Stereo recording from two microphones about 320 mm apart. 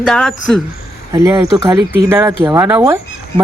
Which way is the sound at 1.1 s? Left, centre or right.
Centre.